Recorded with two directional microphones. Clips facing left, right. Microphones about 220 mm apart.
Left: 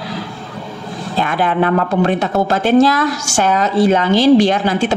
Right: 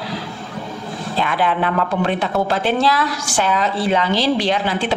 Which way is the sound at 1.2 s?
45° left (ahead or behind).